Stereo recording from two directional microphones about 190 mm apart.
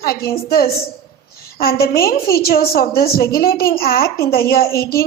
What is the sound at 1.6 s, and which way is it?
A woman's voice, 55° left (ahead or behind).